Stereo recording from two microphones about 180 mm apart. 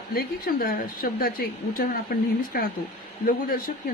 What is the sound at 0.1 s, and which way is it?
A woman's voice, 55° left (ahead or behind).